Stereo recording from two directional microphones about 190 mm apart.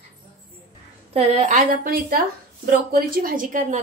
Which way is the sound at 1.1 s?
35° right (ahead or behind).